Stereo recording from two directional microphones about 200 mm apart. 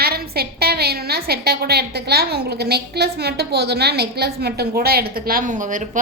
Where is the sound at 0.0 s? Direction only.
50° right (ahead or behind).